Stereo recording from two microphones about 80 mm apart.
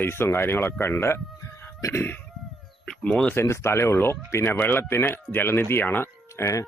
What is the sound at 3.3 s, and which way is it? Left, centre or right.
Speech, left.